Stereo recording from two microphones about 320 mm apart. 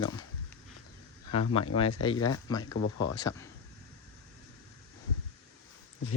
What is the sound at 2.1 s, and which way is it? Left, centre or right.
Speech, left.